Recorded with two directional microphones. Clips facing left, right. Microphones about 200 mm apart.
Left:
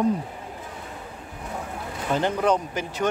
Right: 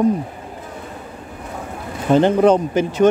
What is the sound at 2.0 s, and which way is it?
Speech, 25° right (ahead or behind).